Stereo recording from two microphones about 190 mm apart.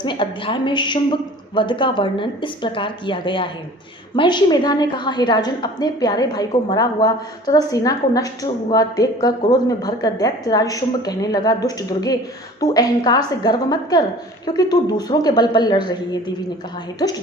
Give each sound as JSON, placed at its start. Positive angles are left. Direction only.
{"t": 0.0, "sound": "a woman's voice", "side_deg": 25}